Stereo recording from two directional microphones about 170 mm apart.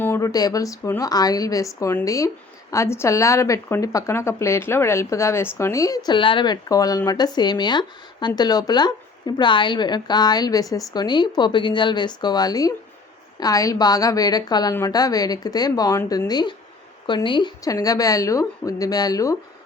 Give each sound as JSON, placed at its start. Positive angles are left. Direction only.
{"t": 0.0, "sound": "a woman's voice", "side_deg": 15}